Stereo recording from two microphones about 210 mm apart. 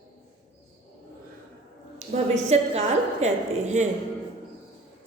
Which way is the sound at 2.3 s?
30° right (ahead or behind).